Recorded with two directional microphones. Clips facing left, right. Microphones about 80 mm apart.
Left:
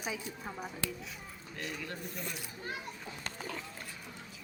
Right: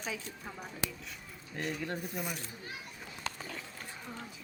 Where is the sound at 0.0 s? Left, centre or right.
Centre.